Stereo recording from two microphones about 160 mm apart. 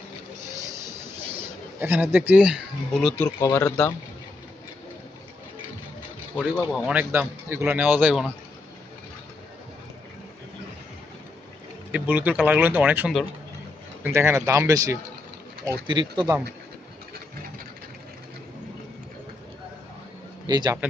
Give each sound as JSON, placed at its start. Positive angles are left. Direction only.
{"t": 0.5, "sound": "train", "side_deg": -20}
{"t": 1.8, "sound": "speech", "side_deg": -10}
{"t": 3.2, "sound": "speech", "side_deg": 20}
{"t": 6.3, "sound": "speech", "side_deg": 5}
{"t": 6.9, "sound": "speech", "side_deg": -10}
{"t": 11.9, "sound": "speech", "side_deg": -10}
{"t": 20.5, "sound": "speech", "side_deg": -25}